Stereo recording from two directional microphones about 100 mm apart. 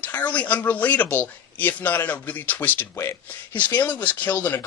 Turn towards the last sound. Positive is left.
turn(degrees=20)  # may be behind; listen again after turning